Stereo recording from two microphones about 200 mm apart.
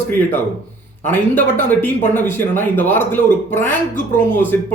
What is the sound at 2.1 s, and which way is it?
Speech, 10° left (ahead or behind).